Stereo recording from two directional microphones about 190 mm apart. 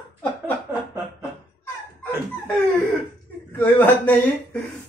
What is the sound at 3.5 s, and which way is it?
Speech, 10° left (ahead or behind).